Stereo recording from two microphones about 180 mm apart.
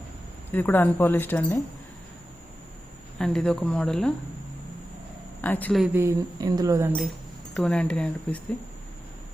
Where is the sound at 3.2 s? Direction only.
5° left (ahead or behind).